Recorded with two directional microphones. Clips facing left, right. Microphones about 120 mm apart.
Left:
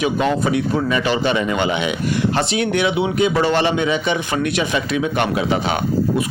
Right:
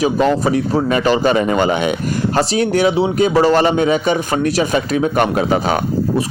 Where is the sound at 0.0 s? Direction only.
35° right (ahead or behind).